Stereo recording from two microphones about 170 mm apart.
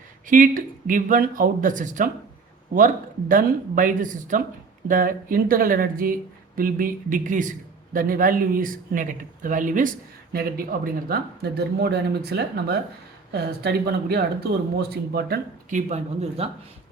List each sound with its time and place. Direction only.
0.3 s a man's voice: 50° right (ahead or behind)
16.4 s speech: 35° right (ahead or behind)